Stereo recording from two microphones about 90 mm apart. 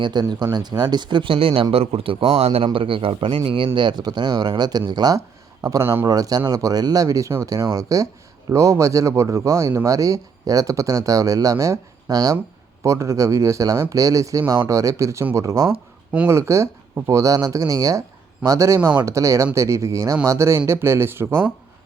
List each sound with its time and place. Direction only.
0.0 s a man's voice: 55° right (ahead or behind)
3.8 s speech: 55° right (ahead or behind)
5.8 s speech: 25° right (ahead or behind)
6.1 s speech: 45° right (ahead or behind); by 21.5 s 25° right (ahead or behind)